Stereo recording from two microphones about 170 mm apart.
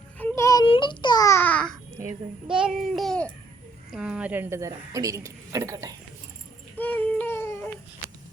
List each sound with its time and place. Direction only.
0.2 s child singing: 15° left (ahead or behind)
0.6 s babbling: 30° left (ahead or behind); by 1.8 s 5° left (ahead or behind)
2.5 s babbling: 5° right (ahead or behind)
3.9 s a woman's voice: 5° right (ahead or behind); by 6.0 s 20° right (ahead or behind)
6.7 s a sound: 10° left (ahead or behind)